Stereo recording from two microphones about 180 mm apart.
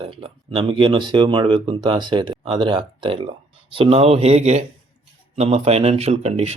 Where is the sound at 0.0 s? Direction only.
30° right (ahead or behind).